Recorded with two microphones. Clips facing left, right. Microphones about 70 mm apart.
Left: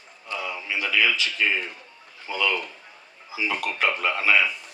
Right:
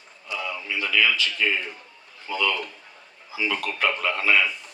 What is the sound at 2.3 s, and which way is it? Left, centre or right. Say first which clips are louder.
Speech: right 1 dB; left.